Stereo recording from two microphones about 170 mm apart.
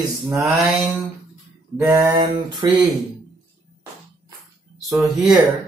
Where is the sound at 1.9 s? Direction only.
20° right (ahead or behind).